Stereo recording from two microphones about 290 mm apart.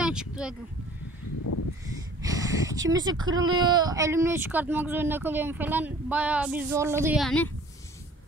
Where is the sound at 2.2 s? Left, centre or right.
Centre.